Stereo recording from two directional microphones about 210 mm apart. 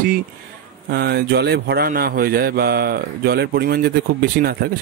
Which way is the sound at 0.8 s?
50° right (ahead or behind).